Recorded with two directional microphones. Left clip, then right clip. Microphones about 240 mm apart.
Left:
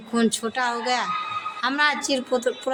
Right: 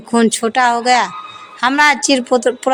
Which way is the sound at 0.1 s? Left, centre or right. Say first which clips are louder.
Right 10 dB; right.